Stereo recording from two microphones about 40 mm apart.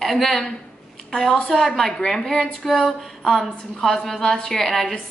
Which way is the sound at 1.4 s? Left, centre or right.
Centre.